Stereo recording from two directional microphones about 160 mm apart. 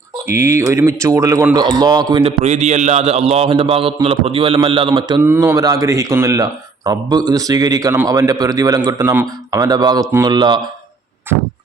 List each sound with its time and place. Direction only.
0.3 s a man's voice: 15° right (ahead or behind)
2.2 s a man's voice: 45° right (ahead or behind); by 5.2 s 30° right (ahead or behind)
5.2 s a man's voice: 15° right (ahead or behind)